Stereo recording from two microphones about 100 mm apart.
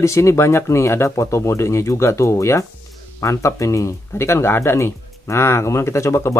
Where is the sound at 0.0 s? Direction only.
30° left (ahead or behind).